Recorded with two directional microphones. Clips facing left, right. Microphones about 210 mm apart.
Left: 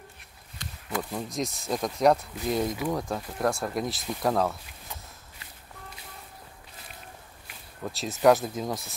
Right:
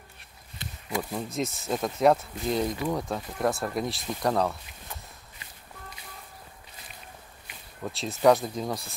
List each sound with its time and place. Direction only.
0.9 s speech: centre (ahead or behind)
7.8 s speech: centre (ahead or behind)